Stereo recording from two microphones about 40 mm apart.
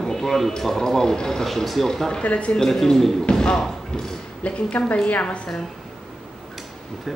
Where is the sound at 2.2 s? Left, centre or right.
Left.